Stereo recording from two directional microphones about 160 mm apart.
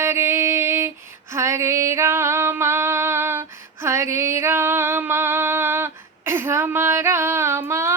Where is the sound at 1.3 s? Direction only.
15° right (ahead or behind).